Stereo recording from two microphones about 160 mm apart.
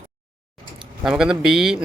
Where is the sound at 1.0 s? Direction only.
5° right (ahead or behind).